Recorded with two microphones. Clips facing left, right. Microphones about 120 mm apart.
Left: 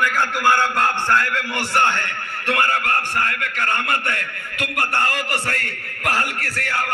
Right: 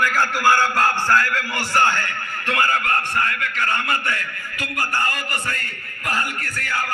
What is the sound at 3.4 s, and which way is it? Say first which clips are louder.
A man's voice: even; 55° left (ahead or behind).